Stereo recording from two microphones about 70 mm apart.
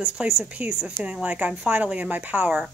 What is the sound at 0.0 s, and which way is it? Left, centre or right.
A woman's voice, centre.